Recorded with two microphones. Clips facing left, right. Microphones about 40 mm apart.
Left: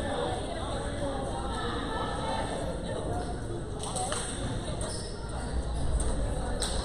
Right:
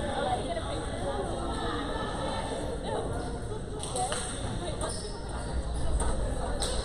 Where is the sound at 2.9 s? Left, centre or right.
Centre.